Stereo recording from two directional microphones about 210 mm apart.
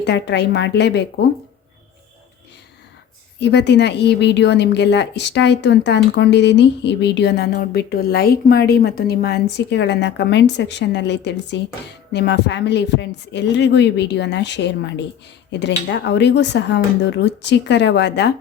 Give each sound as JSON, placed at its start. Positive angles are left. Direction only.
{"t": 0.0, "sound": "speech", "side_deg": 55}
{"t": 3.4, "sound": "a woman's voice", "side_deg": 55}